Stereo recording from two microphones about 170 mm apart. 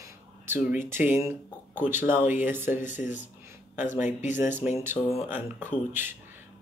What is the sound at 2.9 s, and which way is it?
Speech, 50° left (ahead or behind).